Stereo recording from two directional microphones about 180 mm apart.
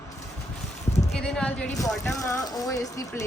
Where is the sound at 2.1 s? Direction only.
15° left (ahead or behind).